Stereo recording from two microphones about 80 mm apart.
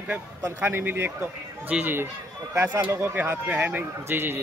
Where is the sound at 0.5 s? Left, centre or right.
Right.